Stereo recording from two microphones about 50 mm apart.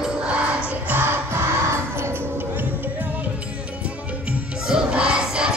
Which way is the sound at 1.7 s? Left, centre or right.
Right.